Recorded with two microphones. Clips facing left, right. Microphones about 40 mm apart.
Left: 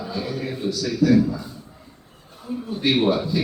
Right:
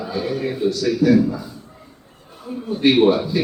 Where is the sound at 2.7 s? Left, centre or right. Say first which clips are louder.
Right 6 dB; centre.